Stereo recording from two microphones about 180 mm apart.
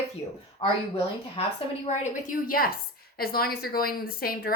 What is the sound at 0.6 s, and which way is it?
Speech, 25° left (ahead or behind).